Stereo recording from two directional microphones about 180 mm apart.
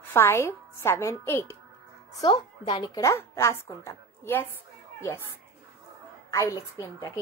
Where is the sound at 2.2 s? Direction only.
25° left (ahead or behind).